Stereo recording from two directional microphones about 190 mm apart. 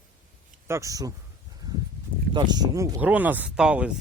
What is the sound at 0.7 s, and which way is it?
Speech, 15° right (ahead or behind).